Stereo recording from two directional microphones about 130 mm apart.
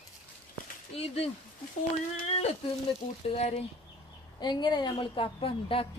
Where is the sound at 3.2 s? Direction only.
55° left (ahead or behind).